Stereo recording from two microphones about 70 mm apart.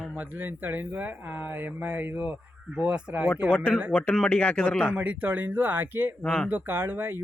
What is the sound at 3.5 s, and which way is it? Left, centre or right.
A man's voice, left.